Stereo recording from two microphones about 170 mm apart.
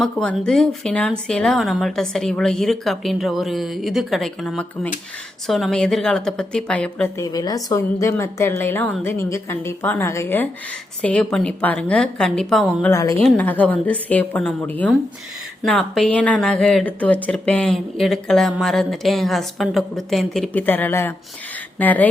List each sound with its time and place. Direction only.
0.0 s speech: 5° left (ahead or behind)
7.2 s a woman's voice: 20° left (ahead or behind); by 12.9 s 5° left (ahead or behind)
12.9 s a woman's voice: 20° left (ahead or behind)